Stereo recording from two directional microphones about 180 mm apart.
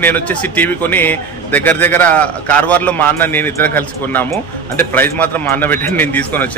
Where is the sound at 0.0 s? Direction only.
10° left (ahead or behind).